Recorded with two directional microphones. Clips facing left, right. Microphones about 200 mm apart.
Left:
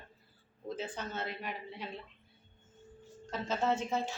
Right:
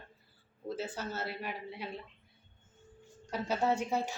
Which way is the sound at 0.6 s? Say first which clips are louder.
Right 2 dB; 5° right (ahead or behind).